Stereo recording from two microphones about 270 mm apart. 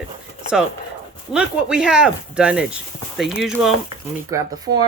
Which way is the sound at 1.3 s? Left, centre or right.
Centre.